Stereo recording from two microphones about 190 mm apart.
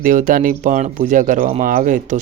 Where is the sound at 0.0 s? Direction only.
45° right (ahead or behind).